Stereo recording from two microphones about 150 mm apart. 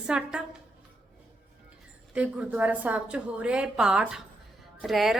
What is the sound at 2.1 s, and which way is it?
A woman's voice, 10° right (ahead or behind).